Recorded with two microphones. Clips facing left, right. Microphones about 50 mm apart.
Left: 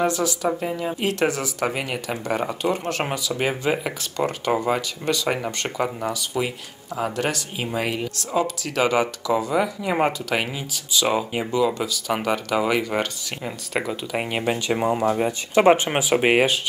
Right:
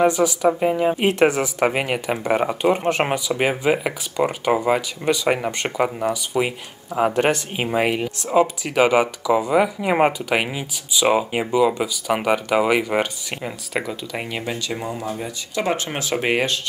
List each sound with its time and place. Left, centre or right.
0.0 s speech: centre
6.3 s speech: right
7.9 s speech: centre
13.5 s speech: centre
14.4 s speech: left
16.0 s speech: centre